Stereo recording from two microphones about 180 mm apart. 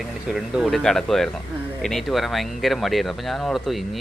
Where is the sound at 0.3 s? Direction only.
Centre (ahead or behind).